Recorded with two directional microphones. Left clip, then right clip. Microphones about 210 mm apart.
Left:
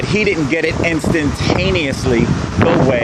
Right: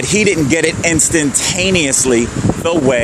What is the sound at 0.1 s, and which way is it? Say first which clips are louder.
Speech: right 3 dB; 45° right (ahead or behind).